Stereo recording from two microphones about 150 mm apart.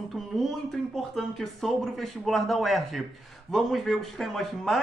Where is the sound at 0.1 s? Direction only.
Centre (ahead or behind).